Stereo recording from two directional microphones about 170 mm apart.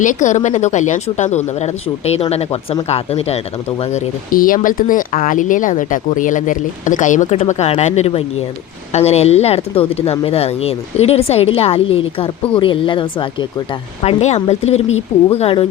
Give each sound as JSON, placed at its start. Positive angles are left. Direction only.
{"t": 0.0, "sound": "speech", "side_deg": 45}
{"t": 4.3, "sound": "speech", "side_deg": 55}